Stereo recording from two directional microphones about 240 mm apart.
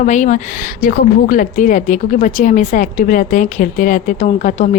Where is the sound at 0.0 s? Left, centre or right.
Left.